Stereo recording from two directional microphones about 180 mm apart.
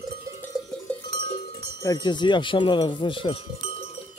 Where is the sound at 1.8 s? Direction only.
25° left (ahead or behind).